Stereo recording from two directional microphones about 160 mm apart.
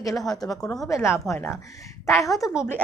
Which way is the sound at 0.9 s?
15° left (ahead or behind).